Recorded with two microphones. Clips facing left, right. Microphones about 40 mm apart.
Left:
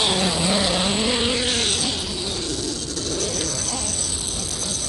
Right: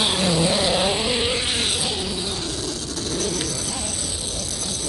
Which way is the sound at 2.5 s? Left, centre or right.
Centre.